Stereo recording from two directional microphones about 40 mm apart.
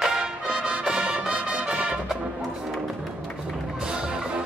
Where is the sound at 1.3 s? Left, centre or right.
Right.